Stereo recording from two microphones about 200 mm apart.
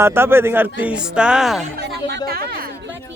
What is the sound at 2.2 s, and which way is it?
Speech, 50° right (ahead or behind).